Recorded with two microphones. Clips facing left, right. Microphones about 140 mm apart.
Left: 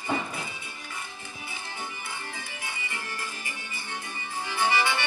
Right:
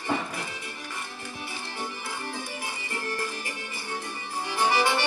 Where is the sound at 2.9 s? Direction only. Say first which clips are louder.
Right 5 dB; 45° right (ahead or behind).